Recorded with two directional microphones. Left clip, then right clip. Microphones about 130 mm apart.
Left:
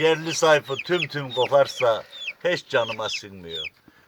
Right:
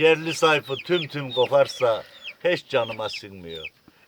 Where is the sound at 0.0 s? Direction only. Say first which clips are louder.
Right 1 dB; 25° right (ahead or behind).